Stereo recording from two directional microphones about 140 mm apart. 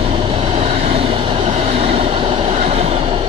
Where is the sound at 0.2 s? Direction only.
40° right (ahead or behind).